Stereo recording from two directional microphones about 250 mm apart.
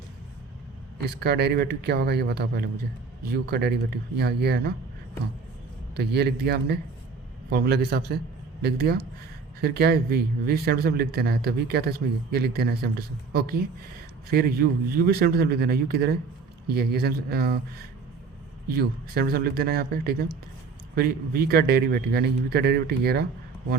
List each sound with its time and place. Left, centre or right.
1.1 s speech: right
6.0 s speech: right
14.3 s speech: right
18.7 s speech: right